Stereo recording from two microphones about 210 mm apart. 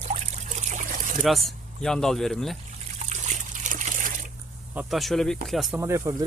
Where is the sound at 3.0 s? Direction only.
35° right (ahead or behind).